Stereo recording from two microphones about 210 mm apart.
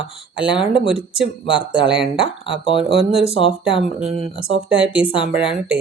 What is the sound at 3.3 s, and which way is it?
Speech, 25° left (ahead or behind).